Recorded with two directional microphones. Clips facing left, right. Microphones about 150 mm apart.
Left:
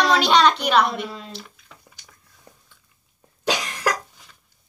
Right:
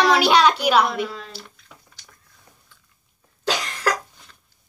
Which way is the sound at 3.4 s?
15° left (ahead or behind).